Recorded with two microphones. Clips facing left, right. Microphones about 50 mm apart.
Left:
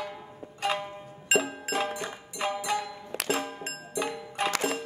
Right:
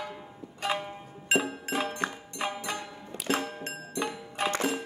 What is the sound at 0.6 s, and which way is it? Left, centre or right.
Zither, centre.